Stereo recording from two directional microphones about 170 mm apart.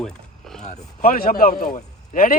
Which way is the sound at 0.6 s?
50° left (ahead or behind).